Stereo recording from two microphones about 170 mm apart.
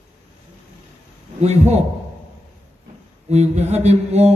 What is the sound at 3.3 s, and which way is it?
A man's voice, 40° right (ahead or behind).